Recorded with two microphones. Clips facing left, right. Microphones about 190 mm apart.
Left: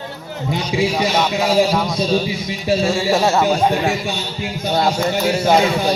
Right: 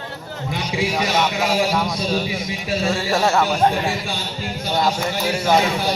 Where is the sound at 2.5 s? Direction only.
30° left (ahead or behind).